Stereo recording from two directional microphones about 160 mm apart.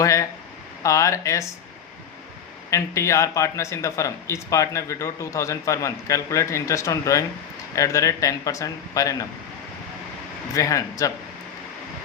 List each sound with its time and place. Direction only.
0.0 s speech: 20° left (ahead or behind)
2.6 s speech: 20° left (ahead or behind)
10.5 s speech: 20° left (ahead or behind)